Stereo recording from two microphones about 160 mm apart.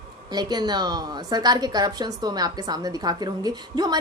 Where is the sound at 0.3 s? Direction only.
25° right (ahead or behind).